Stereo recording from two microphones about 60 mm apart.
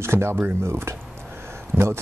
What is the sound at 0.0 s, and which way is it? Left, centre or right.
Speech, right.